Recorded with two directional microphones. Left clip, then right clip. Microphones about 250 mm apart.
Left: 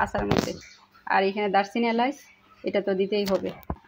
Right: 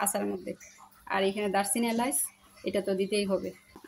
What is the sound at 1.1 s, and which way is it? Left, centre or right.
A woman's voice, centre.